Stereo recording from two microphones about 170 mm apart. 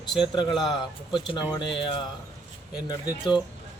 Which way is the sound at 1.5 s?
30° left (ahead or behind).